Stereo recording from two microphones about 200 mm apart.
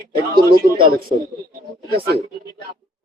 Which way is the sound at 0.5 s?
50° right (ahead or behind).